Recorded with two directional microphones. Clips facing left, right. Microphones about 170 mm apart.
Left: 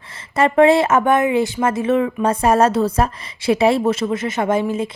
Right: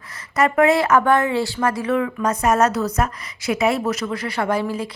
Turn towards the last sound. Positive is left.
turn(degrees=20)  # may be behind; listen again after turning